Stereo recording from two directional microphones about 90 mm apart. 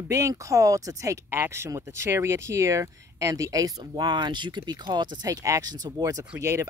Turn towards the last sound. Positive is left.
turn(degrees=-35)  # may be behind; listen again after turning